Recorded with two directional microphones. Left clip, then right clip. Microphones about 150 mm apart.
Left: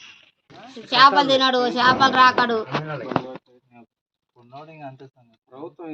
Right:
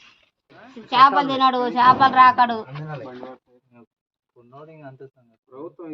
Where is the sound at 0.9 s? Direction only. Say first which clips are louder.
Left 1 dB; 60° right (ahead or behind).